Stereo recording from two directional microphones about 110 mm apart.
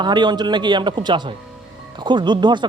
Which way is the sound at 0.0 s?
45° right (ahead or behind).